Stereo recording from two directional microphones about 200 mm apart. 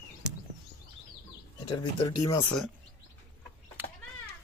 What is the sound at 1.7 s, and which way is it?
Speech, 20° left (ahead or behind).